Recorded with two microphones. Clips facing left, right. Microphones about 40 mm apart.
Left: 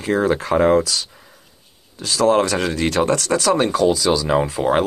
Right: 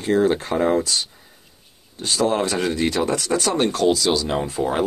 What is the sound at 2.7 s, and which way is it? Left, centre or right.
Speech, left.